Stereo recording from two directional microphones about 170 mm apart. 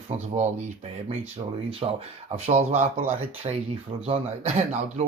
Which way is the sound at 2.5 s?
40° right (ahead or behind).